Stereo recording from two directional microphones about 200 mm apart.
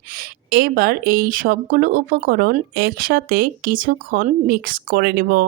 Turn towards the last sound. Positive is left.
turn(degrees=-45)  # may be behind; listen again after turning